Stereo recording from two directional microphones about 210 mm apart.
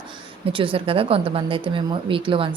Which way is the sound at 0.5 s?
25° right (ahead or behind).